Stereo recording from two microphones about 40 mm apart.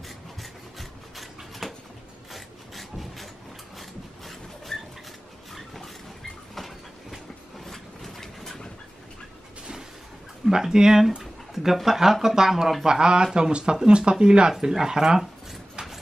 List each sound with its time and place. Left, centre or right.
0.4 s rub: centre
3.7 s a sound: centre
6.5 s train: centre
7.6 s vehicle: centre
10.4 s speech: centre